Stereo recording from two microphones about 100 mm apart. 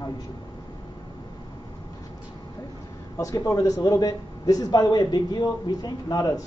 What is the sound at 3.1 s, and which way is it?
Speech, 30° left (ahead or behind).